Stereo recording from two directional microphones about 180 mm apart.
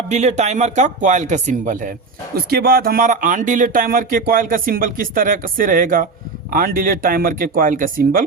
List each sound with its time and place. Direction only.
0.1 s speech: 40° right (ahead or behind)
2.3 s speech: 60° right (ahead or behind)